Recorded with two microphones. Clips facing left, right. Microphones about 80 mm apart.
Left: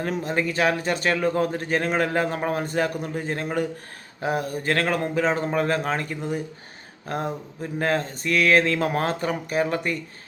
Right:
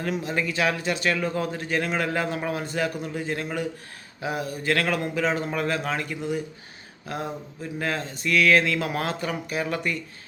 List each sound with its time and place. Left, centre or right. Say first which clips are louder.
0.0 s a man's voice: left 2 dB; left